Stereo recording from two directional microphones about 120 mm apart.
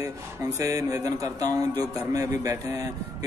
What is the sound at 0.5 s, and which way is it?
Speech, 25° right (ahead or behind).